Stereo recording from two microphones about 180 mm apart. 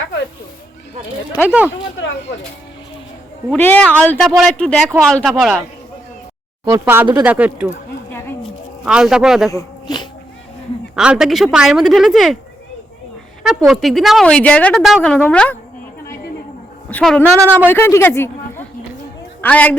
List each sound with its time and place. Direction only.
1.5 s speech: 5° right (ahead or behind)
3.5 s a woman's voice: 5° left (ahead or behind)
6.7 s speech: 15° right (ahead or behind)
8.8 s a woman's voice: 5° right (ahead or behind)
9.5 s a sound: 20° left (ahead or behind)
10.9 s a woman's voice: 5° right (ahead or behind)
13.4 s a woman's voice: 5° right (ahead or behind)
16.9 s a woman's voice: 5° left (ahead or behind)
17.3 s speech: 15° right (ahead or behind)
17.7 s a man's voice: 15° left (ahead or behind)